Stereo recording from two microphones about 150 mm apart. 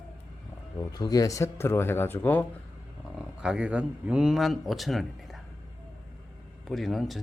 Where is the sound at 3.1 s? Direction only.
5° right (ahead or behind).